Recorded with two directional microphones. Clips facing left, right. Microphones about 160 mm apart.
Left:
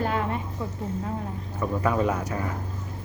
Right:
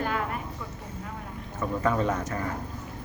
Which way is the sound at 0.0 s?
25° left (ahead or behind).